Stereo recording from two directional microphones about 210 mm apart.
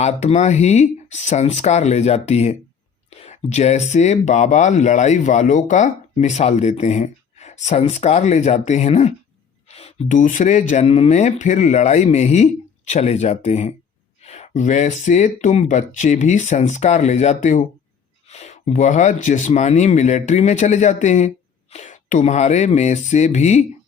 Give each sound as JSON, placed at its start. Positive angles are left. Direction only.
{"t": 0.0, "sound": "speech", "side_deg": 30}